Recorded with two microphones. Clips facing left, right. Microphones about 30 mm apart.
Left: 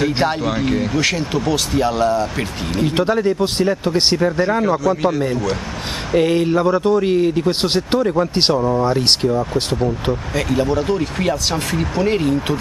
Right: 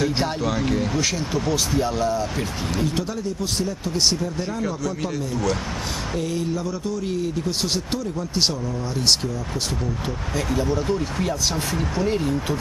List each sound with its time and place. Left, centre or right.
0.0 s speech: left
1.0 s speech: left
6.1 s a man's voice: left
8.8 s speech: left